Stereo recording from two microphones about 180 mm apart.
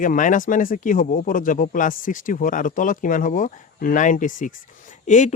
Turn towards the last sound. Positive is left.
turn(degrees=45)  # may be behind; listen again after turning